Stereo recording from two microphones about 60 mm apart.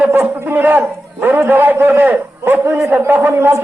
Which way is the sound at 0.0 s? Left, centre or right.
Right.